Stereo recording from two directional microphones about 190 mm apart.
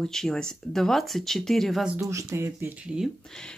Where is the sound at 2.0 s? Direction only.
15° right (ahead or behind); by 3.5 s 5° left (ahead or behind).